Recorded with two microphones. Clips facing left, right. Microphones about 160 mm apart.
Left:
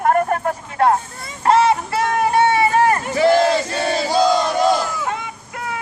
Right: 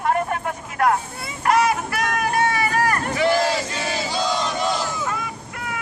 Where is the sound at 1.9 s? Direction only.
25° left (ahead or behind).